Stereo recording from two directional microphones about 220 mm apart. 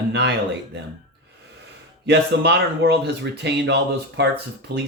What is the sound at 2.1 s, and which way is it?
Speech, 50° right (ahead or behind).